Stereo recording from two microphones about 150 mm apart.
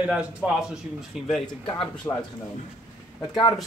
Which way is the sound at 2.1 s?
20° left (ahead or behind).